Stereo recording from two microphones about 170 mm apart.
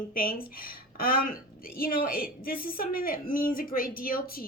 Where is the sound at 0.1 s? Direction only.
55° left (ahead or behind).